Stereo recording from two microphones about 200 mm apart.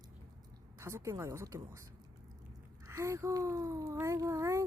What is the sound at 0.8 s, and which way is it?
Speech, 15° right (ahead or behind).